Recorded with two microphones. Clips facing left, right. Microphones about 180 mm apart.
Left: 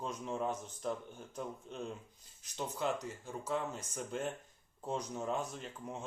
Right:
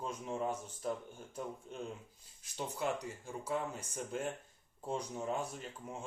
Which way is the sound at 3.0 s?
10° right (ahead or behind).